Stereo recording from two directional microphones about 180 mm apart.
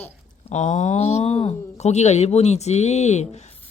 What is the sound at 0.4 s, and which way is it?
Speech, 40° left (ahead or behind).